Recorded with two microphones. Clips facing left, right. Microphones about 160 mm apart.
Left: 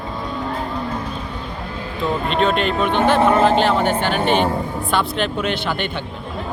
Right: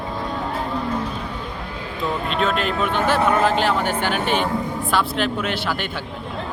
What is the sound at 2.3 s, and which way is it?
Speech, centre (ahead or behind).